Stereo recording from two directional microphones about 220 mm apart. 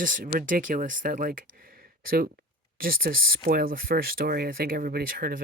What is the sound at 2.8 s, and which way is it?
Speech, 40° right (ahead or behind).